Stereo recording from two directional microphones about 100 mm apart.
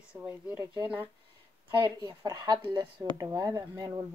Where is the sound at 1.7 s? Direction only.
50° right (ahead or behind).